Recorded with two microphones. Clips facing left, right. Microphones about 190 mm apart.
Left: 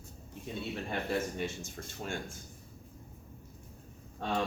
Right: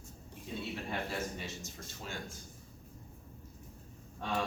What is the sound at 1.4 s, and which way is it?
Speech, 50° left (ahead or behind).